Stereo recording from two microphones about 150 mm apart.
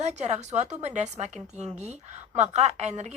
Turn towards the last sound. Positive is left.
turn(degrees=-50)  # may be behind; listen again after turning